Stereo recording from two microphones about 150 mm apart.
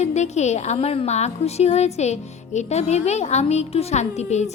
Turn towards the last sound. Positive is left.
turn(degrees=50)  # may be behind; listen again after turning